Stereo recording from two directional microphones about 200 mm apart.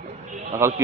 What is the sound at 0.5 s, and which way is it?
Speech, 15° right (ahead or behind).